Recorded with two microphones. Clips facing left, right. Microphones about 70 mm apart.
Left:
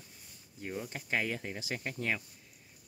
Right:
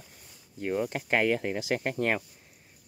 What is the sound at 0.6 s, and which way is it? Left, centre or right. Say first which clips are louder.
Speech: right 10 dB; right.